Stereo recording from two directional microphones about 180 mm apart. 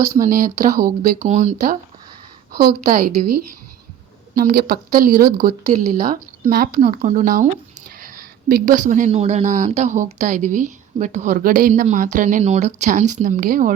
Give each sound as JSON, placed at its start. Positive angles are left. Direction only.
{"t": 0.2, "sound": "speech", "side_deg": -50}
{"t": 2.5, "sound": "speech", "side_deg": -55}
{"t": 4.4, "sound": "speech", "side_deg": -55}